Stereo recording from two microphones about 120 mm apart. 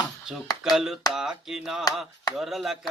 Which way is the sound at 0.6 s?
5° right (ahead or behind).